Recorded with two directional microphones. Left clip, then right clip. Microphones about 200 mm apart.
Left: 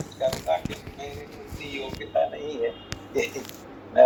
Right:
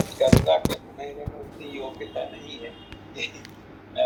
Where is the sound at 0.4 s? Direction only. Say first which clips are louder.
Right 5 dB; 55° right (ahead or behind).